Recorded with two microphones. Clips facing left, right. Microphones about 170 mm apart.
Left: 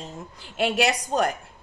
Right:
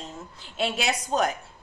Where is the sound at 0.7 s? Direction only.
65° left (ahead or behind).